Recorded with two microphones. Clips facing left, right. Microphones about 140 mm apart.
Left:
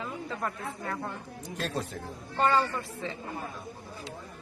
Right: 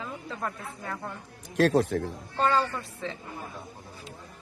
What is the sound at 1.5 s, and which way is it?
Speech, 85° right.